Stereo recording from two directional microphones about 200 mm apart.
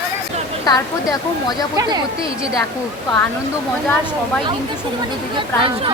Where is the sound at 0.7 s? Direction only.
20° left (ahead or behind).